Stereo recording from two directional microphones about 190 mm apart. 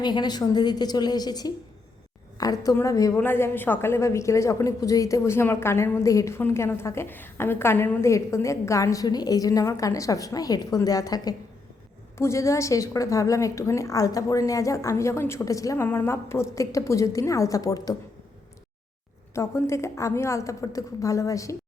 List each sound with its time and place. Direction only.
0.0 s a woman's voice: 20° left (ahead or behind)
19.3 s a woman's voice: 15° left (ahead or behind)